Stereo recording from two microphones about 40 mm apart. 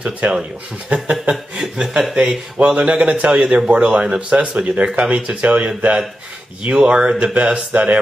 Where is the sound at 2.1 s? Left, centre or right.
Right.